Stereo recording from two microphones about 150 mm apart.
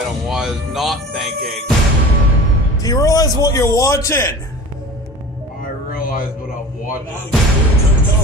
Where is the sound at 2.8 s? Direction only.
25° left (ahead or behind).